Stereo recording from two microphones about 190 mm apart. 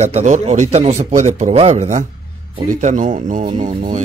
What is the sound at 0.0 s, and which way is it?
Speech, 35° right (ahead or behind).